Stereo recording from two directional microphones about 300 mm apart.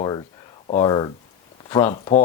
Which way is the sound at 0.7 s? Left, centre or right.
Centre.